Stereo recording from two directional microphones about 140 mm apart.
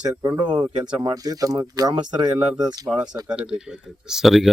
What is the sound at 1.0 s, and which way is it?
Speech, 25° right (ahead or behind).